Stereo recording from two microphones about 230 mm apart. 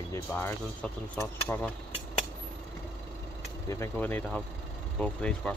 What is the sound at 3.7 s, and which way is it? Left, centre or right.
Speech, centre.